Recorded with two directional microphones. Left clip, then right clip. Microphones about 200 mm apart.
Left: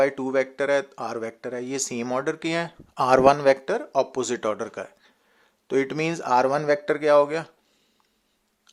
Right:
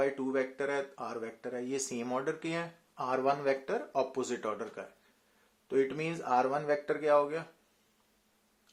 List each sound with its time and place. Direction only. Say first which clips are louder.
0.0 s speech: left 9 dB; 40° left (ahead or behind)